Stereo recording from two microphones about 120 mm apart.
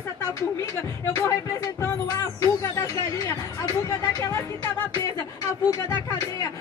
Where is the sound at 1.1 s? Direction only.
25° left (ahead or behind).